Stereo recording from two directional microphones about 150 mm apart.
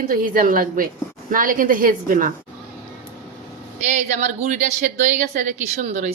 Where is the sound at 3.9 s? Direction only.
50° right (ahead or behind).